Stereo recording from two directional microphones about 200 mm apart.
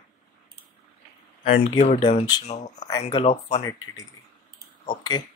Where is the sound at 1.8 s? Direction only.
30° left (ahead or behind).